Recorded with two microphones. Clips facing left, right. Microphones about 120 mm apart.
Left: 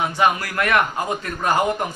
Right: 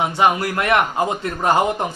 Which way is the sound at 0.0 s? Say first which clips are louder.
Right 2 dB; 25° right (ahead or behind).